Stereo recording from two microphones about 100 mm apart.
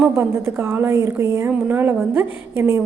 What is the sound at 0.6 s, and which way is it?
A woman's voice, 25° right (ahead or behind).